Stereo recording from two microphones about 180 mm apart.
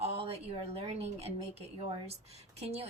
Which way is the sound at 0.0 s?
35° right (ahead or behind).